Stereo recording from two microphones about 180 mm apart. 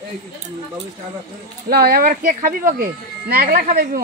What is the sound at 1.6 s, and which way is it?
Speech, 55° right (ahead or behind).